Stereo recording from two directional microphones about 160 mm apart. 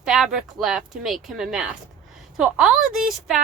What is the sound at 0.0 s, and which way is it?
A woman's voice, 5° right (ahead or behind).